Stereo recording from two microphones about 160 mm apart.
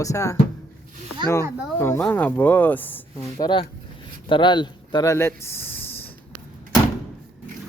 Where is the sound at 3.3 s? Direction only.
25° left (ahead or behind).